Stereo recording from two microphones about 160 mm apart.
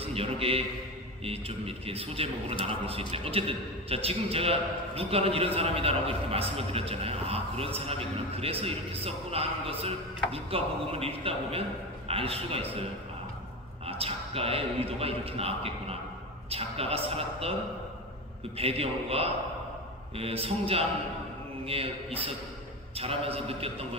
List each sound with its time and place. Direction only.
0.0 s a man's voice: 40° right (ahead or behind)
13.8 s a man's voice: 40° right (ahead or behind)
18.6 s a man's voice: 40° right (ahead or behind)